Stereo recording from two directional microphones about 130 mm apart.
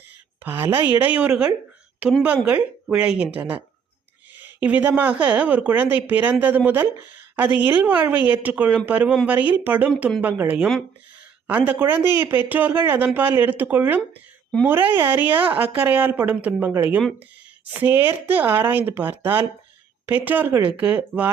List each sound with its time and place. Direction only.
0.4 s speech: 15° right (ahead or behind)
4.4 s speech: 10° right (ahead or behind)
7.3 s speech: 10° right (ahead or behind)